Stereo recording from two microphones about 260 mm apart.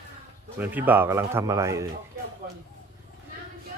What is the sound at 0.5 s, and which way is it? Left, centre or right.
Speech, centre.